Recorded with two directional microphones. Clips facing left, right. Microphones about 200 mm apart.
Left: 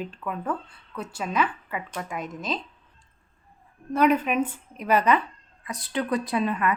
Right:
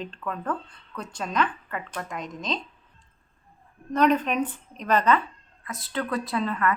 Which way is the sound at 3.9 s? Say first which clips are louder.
Left 1 dB; 10° left (ahead or behind).